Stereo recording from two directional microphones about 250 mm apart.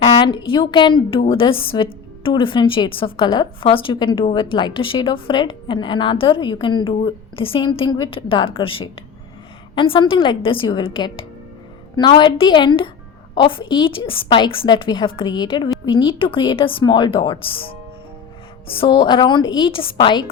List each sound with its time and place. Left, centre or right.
0.0 s a woman's voice: left